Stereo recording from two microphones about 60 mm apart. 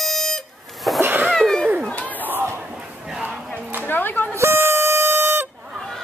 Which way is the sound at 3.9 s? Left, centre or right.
Left.